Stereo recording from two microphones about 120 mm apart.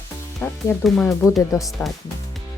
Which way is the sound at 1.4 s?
25° left (ahead or behind).